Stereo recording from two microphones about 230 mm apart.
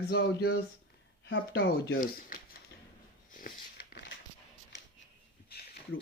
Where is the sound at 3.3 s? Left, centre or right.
Left.